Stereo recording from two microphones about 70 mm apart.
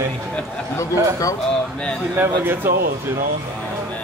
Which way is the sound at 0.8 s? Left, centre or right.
Left.